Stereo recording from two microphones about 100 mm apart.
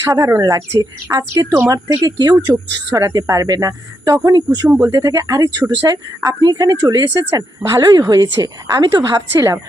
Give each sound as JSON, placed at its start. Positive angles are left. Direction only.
{"t": 0.0, "sound": "speech", "side_deg": -30}
{"t": 1.5, "sound": "a woman's voice", "side_deg": -25}
{"t": 1.9, "sound": "speech", "side_deg": -40}
{"t": 6.4, "sound": "speech", "side_deg": -40}
{"t": 9.3, "sound": "speech", "side_deg": -30}